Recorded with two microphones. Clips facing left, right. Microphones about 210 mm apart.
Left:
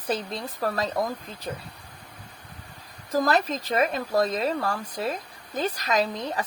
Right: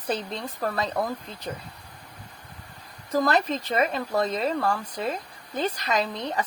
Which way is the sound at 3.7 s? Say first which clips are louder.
Left 2 dB; 40° left (ahead or behind).